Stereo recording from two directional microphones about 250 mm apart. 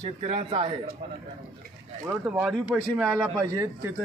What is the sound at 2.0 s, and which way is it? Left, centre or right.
Speech, centre.